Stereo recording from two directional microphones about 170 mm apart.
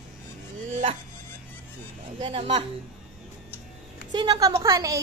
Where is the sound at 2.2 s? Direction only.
30° right (ahead or behind).